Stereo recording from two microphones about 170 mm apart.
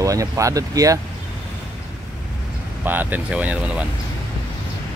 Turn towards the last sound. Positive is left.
turn(degrees=-5)  # may be behind; listen again after turning